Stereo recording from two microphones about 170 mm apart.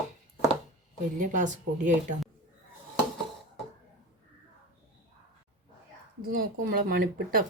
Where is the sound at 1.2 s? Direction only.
50° right (ahead or behind).